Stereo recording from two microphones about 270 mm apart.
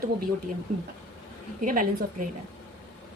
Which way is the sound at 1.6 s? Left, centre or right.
Right.